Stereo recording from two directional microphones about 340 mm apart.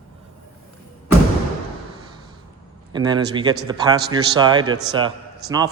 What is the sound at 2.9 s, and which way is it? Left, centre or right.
A man's voice, centre.